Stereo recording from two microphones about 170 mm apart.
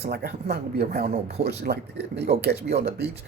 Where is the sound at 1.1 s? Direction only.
40° right (ahead or behind).